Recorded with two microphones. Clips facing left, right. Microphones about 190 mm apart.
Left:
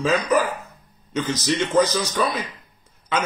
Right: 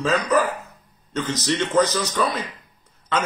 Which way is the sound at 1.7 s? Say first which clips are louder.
Even; 15° left (ahead or behind).